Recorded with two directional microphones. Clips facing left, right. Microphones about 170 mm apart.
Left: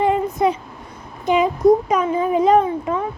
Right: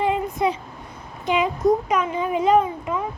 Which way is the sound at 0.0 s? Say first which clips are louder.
Left 4 dB; 45° left (ahead or behind).